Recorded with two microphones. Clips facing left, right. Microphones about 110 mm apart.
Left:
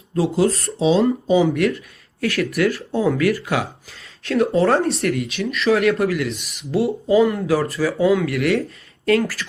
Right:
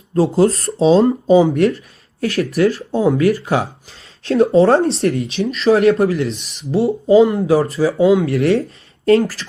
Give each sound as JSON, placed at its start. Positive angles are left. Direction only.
{"t": 0.1, "sound": "speech", "side_deg": -35}